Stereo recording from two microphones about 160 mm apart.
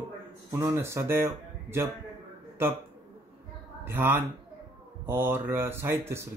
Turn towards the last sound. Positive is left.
turn(degrees=-15)  # may be behind; listen again after turning